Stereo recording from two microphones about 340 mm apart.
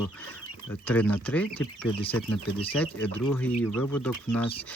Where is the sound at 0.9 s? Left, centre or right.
Centre.